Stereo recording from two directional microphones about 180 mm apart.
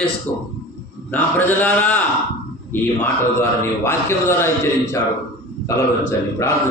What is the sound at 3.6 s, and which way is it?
Speech, 15° left (ahead or behind).